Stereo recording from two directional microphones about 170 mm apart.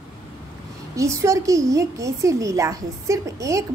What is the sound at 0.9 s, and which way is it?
A woman's voice, 20° right (ahead or behind).